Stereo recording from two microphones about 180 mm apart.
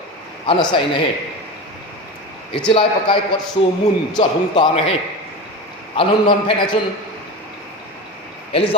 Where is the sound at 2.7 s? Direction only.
30° left (ahead or behind).